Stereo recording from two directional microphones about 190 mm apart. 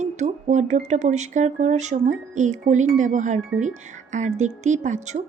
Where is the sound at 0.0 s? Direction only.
40° right (ahead or behind).